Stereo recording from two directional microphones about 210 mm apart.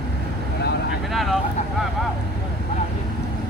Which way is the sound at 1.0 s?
Centre (ahead or behind).